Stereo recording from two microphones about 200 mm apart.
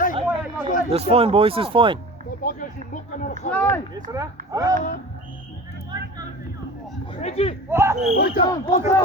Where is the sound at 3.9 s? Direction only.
15° right (ahead or behind).